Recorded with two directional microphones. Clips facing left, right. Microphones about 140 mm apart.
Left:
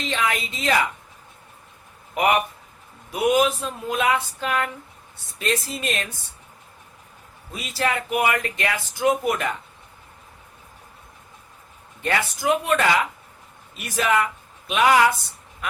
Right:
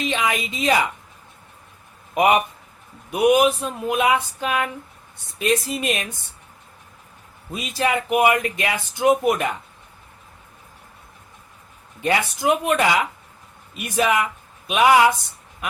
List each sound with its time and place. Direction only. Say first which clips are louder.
0.0 s a woman's voice: right 2 dB; 15° right (ahead or behind)
2.1 s a woman's voice: right 3 dB; 20° right (ahead or behind)
7.5 s speech: right 3 dB; 20° right (ahead or behind)
12.0 s a woman's voice: right 2 dB; 20° right (ahead or behind)